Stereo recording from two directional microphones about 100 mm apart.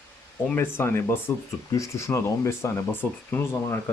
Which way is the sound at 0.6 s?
20° left (ahead or behind).